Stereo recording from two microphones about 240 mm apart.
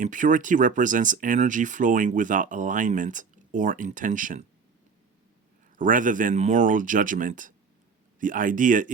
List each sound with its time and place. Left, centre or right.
0.0 s speech: right
5.7 s speech: right